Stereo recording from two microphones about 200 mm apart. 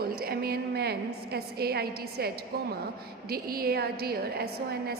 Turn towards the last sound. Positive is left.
turn(degrees=-50)  # may be behind; listen again after turning